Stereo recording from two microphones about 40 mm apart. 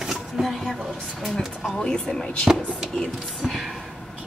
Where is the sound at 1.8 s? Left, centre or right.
Left.